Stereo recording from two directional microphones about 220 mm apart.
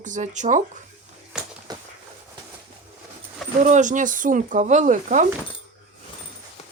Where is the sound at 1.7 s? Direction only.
15° right (ahead or behind).